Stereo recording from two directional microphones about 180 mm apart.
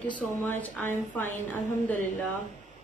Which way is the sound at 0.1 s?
10° left (ahead or behind).